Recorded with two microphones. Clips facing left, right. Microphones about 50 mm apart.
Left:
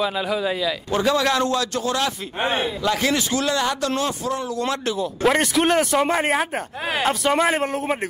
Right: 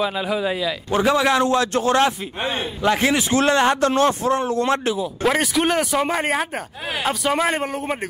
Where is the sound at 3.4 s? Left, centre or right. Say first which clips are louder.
Right 5 dB; right.